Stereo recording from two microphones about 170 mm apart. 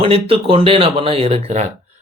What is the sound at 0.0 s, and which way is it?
Speech, 35° right (ahead or behind).